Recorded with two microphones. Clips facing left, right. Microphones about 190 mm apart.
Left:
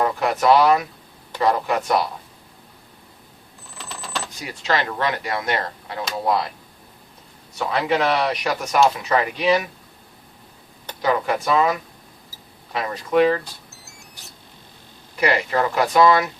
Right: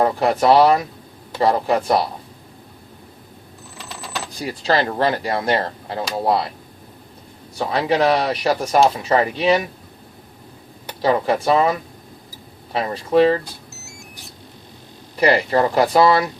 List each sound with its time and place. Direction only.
0.0 s speech: 30° right (ahead or behind)
4.3 s speech: 35° right (ahead or behind)
7.5 s speech: 35° right (ahead or behind)
11.0 s speech: 30° right (ahead or behind)
15.2 s speech: 35° right (ahead or behind)